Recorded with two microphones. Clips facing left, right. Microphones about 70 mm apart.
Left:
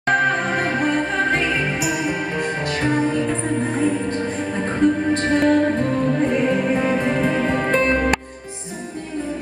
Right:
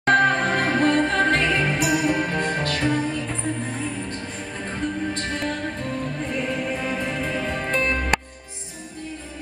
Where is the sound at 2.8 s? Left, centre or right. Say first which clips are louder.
Left 7 dB; left.